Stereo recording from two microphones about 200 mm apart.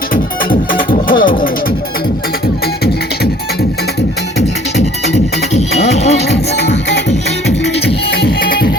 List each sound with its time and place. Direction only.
0.1 s music: 45° left (ahead or behind)
5.5 s music: 35° left (ahead or behind)
6.2 s music: 55° left (ahead or behind)